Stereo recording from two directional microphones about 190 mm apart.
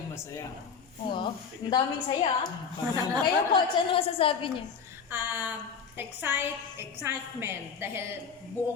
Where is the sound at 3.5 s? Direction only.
30° left (ahead or behind).